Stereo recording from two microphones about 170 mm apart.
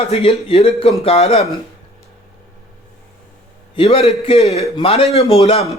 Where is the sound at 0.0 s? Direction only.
35° left (ahead or behind).